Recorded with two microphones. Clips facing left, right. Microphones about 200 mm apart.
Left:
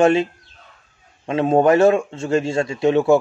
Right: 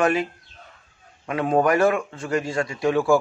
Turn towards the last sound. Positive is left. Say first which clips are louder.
# left 4 dB
turn(degrees=25)  # may be behind; listen again after turning